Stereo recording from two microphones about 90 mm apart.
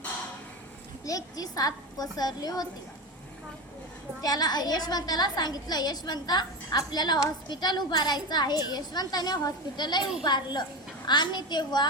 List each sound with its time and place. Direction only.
1.0 s a woman's voice: 45° left (ahead or behind)
4.2 s a woman's voice: 45° left (ahead or behind)